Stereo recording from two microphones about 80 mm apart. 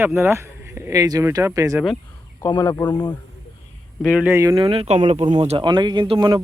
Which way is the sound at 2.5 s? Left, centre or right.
Left.